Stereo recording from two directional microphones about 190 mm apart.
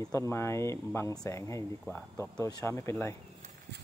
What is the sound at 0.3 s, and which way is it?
Speech, 15° left (ahead or behind).